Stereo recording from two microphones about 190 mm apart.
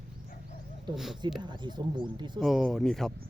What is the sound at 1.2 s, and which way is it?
Speech, 25° right (ahead or behind).